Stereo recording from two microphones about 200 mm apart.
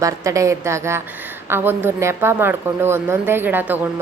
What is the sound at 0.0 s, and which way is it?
A woman's voice, 15° right (ahead or behind).